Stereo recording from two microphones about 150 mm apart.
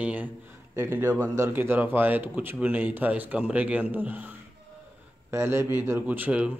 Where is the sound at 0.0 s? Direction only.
10° right (ahead or behind).